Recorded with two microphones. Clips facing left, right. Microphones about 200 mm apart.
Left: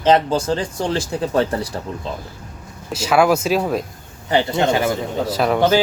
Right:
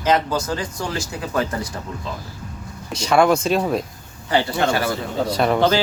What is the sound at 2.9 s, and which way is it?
Speech, 5° left (ahead or behind).